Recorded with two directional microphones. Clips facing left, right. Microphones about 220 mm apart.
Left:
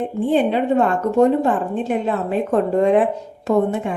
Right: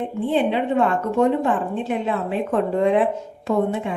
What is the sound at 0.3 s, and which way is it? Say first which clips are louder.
A woman's voice: left 3 dB; 45° left (ahead or behind).